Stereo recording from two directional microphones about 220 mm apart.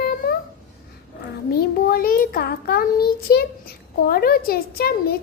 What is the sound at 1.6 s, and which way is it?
Child singing, 40° left (ahead or behind).